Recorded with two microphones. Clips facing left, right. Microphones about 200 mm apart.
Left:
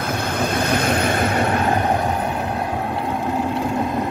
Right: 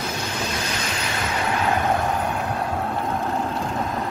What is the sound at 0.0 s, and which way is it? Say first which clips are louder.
Vehicle: left 6 dB; 55° left (ahead or behind).